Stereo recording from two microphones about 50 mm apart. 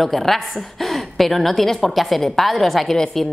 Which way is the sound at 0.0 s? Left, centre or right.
Centre.